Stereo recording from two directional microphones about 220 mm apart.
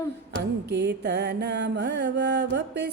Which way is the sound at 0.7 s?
50° right (ahead or behind).